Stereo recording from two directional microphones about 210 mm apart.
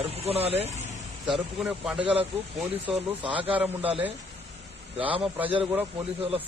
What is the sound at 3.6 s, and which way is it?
Speech, 5° right (ahead or behind).